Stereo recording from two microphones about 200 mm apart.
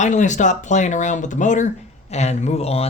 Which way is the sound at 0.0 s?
35° left (ahead or behind).